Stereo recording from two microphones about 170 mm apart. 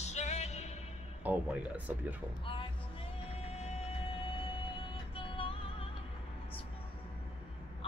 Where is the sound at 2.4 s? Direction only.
30° left (ahead or behind).